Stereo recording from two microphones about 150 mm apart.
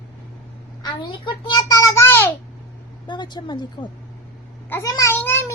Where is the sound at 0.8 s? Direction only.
30° left (ahead or behind).